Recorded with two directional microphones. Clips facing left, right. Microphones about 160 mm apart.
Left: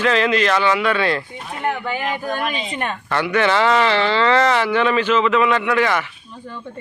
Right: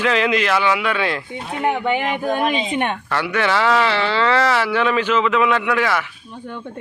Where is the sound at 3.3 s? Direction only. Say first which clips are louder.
Left 1 dB; 10° right (ahead or behind).